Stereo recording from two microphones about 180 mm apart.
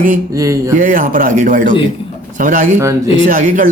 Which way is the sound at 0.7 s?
50° right (ahead or behind).